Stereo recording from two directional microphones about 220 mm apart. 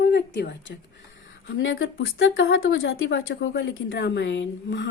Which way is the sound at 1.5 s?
60° left (ahead or behind).